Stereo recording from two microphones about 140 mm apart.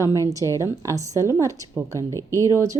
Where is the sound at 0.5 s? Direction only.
20° right (ahead or behind).